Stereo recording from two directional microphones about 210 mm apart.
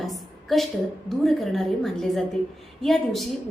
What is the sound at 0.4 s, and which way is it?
A woman's voice, centre (ahead or behind).